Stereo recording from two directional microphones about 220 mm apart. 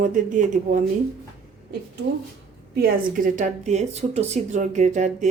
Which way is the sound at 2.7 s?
40° right (ahead or behind).